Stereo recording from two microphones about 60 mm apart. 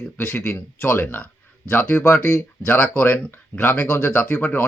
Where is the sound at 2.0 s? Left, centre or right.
Left.